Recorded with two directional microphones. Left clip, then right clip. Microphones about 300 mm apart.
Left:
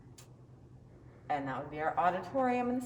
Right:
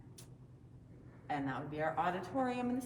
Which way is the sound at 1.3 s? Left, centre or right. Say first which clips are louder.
Left 4 dB; left.